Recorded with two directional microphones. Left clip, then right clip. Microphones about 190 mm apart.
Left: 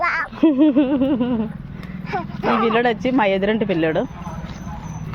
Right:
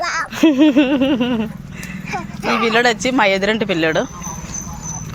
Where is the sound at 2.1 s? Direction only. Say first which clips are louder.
Even; 15° left (ahead or behind).